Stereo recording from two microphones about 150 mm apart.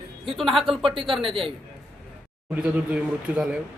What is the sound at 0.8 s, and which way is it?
Speech, 35° right (ahead or behind).